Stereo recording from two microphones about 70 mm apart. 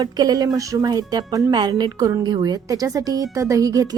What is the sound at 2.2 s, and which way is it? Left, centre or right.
A woman's voice, right.